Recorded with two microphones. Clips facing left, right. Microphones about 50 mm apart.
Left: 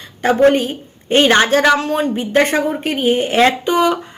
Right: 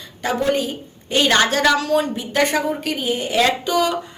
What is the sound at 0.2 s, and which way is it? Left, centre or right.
A woman's voice, left.